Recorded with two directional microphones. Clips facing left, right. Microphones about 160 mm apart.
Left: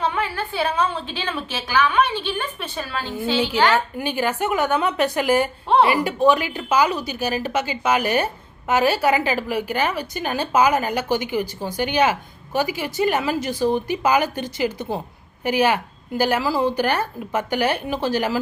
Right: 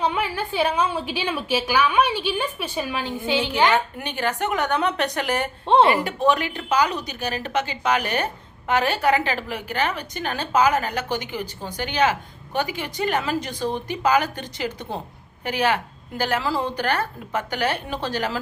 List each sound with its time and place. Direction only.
0.0 s a woman's voice: 15° right (ahead or behind)
3.9 s a woman's voice: 5° left (ahead or behind)
5.6 s speech: 25° right (ahead or behind)
6.0 s a woman's voice: centre (ahead or behind)